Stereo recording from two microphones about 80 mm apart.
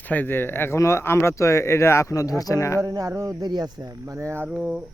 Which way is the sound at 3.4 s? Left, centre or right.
Right.